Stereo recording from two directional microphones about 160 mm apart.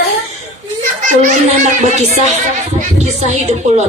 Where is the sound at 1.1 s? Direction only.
50° right (ahead or behind).